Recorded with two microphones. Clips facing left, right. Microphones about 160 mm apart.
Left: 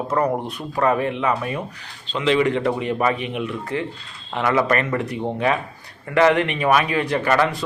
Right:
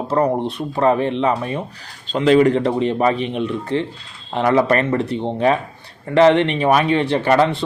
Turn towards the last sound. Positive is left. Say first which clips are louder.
# right 4 dB
turn(degrees=-30)  # may be behind; listen again after turning